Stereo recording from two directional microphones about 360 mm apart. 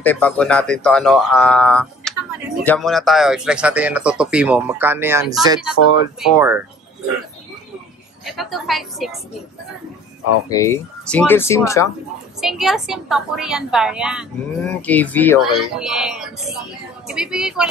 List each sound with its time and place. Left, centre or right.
0.0 s speech: centre
5.8 s speech: left
6.1 s speech: centre
8.3 s speech: centre
10.5 s speech: centre